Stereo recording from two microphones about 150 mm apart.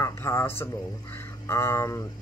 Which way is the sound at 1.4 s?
20° left (ahead or behind).